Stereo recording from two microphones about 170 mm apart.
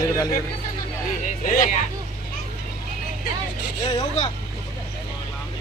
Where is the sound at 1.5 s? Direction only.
50° left (ahead or behind).